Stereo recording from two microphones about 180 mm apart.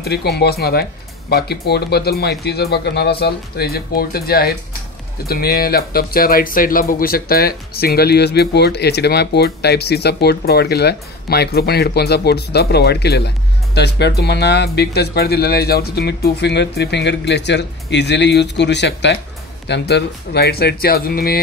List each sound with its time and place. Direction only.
0.0 s speech: 65° left (ahead or behind)